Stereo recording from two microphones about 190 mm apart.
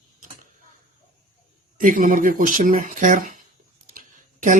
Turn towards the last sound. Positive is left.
turn(degrees=-45)  # may be behind; listen again after turning